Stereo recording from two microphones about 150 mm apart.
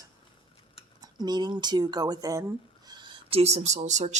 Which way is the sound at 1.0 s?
30° right (ahead or behind).